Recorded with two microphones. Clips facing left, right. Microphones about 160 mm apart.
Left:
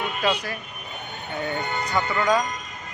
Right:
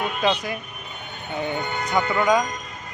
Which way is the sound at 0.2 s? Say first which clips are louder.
Right 2 dB; 20° right (ahead or behind).